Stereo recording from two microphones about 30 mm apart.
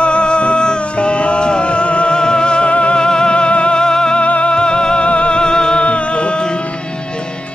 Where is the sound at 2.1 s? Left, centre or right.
Left.